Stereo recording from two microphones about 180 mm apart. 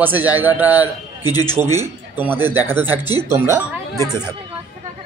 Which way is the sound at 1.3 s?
20° left (ahead or behind).